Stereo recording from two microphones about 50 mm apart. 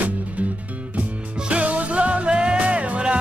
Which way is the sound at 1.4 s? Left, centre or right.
Right.